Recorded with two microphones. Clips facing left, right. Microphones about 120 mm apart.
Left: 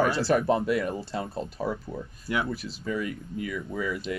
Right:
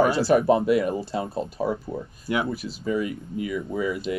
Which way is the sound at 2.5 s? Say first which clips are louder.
Right 5 dB; 5° right (ahead or behind).